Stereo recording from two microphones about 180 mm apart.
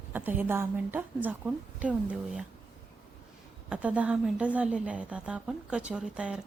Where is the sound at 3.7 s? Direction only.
5° right (ahead or behind).